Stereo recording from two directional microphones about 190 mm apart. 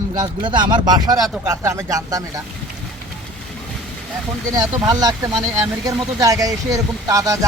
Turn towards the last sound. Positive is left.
turn(degrees=-15)  # may be behind; listen again after turning